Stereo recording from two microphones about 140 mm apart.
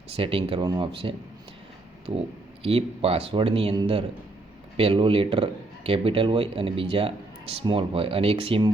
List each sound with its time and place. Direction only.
0.2 s speech: 40° right (ahead or behind)
2.1 s speech: 50° right (ahead or behind)